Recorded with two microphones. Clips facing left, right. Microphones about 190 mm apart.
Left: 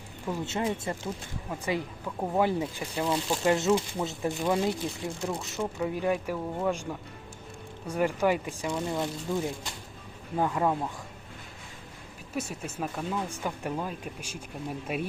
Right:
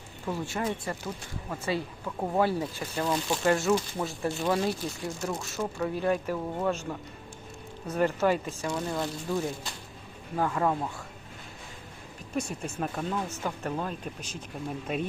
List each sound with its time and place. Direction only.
0.3 s speech: 20° left (ahead or behind)
2.0 s speech: centre (ahead or behind)
2.4 s speech: 15° left (ahead or behind)
12.3 s speech: 5° left (ahead or behind)
13.2 s speech: 15° left (ahead or behind)